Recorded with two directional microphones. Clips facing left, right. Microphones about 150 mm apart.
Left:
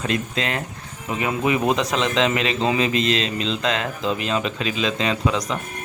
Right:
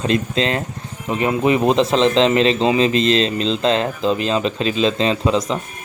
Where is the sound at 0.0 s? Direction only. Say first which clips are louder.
Right 6 dB; 25° right (ahead or behind).